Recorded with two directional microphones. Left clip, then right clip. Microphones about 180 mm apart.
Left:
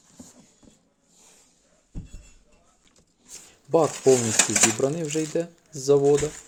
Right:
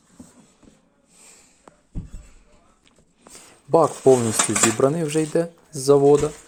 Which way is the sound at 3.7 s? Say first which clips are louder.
Right 4 dB; 25° right (ahead or behind).